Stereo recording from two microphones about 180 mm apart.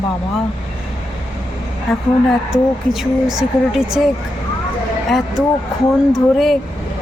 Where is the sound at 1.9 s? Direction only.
Centre (ahead or behind).